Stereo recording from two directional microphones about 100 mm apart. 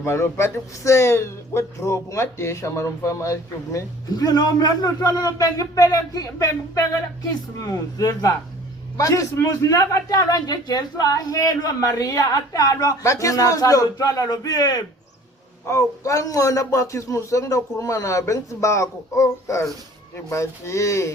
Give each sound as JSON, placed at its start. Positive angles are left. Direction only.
{"t": 0.0, "sound": "speech", "side_deg": 25}